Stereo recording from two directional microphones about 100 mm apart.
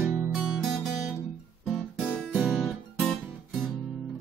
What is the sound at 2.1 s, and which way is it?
Music, 10° left (ahead or behind).